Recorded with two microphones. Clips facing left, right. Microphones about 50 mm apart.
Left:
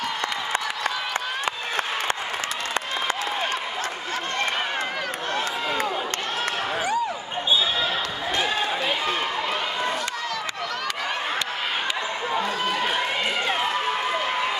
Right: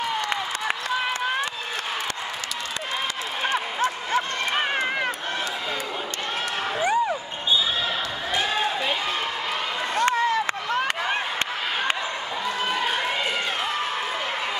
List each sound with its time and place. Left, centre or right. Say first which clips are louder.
3.4 s a sound: right 3 dB; right
6.8 s basketball bounce: right 5 dB; centre
8.4 s run: even; centre
10.0 s run: right 7 dB; right